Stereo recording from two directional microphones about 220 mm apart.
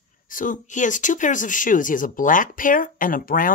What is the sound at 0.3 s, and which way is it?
Speech, 35° left (ahead or behind).